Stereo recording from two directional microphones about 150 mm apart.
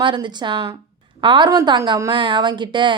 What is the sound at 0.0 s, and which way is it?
A woman's voice, 30° right (ahead or behind).